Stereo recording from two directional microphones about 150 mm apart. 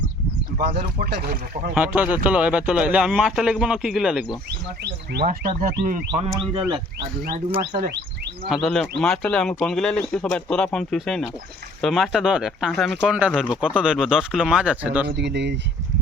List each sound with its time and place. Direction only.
0.6 s speech: 90° right
1.7 s speech: 10° right (ahead or behind)
5.1 s speech: 65° right (ahead or behind)
6.5 s speech: 35° right (ahead or behind)
8.4 s speech: centre (ahead or behind)